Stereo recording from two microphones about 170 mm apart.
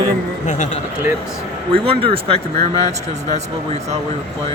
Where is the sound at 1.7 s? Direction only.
30° right (ahead or behind).